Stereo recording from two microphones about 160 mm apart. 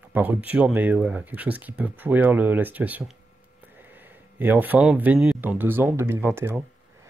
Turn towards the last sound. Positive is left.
turn(degrees=-10)  # may be behind; listen again after turning